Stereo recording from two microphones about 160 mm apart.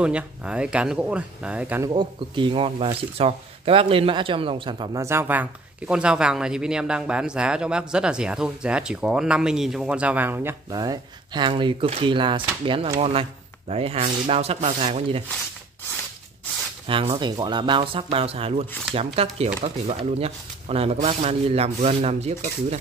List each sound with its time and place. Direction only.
0.0 s speech: 5° right (ahead or behind)
1.9 s speech: 30° right (ahead or behind)
5.0 s speech: 15° right (ahead or behind)
10.7 s speech: 25° right (ahead or behind); by 14.9 s 40° right (ahead or behind)
16.8 s speech: 35° right (ahead or behind)